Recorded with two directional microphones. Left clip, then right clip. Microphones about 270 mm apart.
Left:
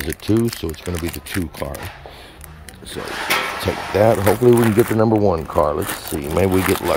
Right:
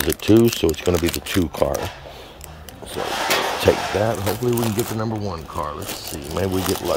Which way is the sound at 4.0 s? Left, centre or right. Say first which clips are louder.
Left 8 dB; centre.